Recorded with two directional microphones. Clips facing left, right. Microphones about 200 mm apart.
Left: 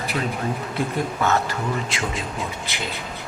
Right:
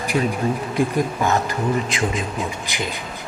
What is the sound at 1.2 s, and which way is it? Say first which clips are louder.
Speech: right 2 dB; 15° right (ahead or behind).